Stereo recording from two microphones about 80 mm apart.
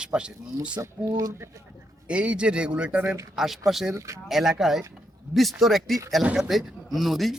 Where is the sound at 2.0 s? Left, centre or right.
Centre.